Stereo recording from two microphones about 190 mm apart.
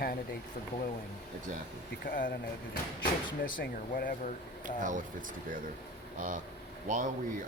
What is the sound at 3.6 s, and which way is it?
Speech, 45° left (ahead or behind).